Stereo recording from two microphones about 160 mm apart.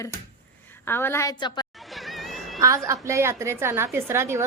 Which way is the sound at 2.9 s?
15° right (ahead or behind).